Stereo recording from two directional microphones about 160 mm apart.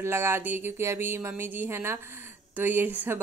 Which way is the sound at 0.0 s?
15° right (ahead or behind).